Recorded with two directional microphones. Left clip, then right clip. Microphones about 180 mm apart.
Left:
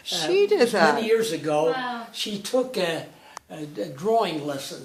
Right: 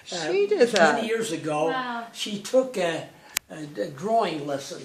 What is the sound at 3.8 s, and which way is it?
Speech, centre (ahead or behind).